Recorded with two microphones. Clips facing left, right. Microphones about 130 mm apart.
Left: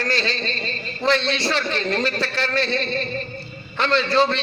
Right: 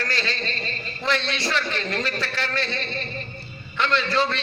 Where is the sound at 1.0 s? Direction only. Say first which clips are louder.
Left 5 dB; 30° left (ahead or behind).